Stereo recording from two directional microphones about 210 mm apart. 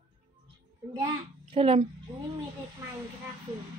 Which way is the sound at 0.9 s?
25° right (ahead or behind).